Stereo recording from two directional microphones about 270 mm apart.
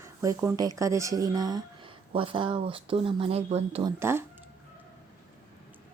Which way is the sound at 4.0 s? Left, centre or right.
Centre.